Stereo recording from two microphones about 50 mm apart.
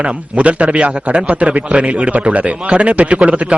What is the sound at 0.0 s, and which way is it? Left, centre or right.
A man's voice, right.